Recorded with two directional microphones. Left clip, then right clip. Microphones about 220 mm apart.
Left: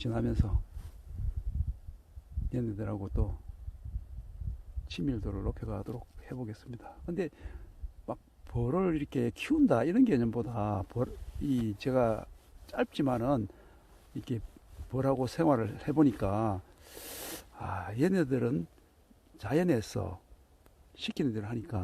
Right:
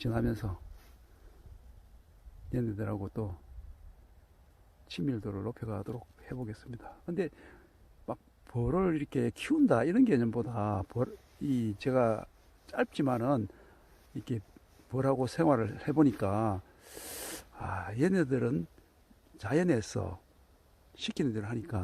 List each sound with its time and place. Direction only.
0.0 s speech: 15° right (ahead or behind)
2.5 s speech: 15° right (ahead or behind)
4.9 s speech: 10° right (ahead or behind)
14.8 s speech: 10° right (ahead or behind)